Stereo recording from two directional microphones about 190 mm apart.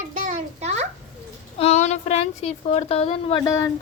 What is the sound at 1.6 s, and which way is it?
A woman's voice, 35° left (ahead or behind).